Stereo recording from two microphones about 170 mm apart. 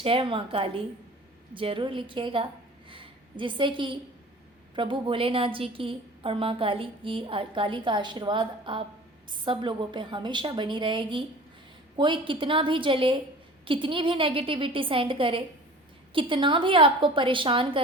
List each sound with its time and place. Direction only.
0.0 s a woman's voice: 30° right (ahead or behind)
2.9 s a sound: 30° right (ahead or behind)
4.7 s a woman's voice: 30° right (ahead or behind)